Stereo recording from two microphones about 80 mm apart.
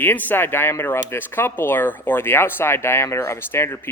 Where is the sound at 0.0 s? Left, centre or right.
Left.